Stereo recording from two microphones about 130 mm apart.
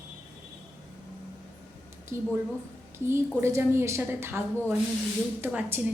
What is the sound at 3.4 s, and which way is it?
A woman's voice, 20° right (ahead or behind).